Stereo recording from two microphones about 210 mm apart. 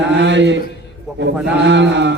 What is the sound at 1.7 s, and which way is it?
Speech, 55° right (ahead or behind).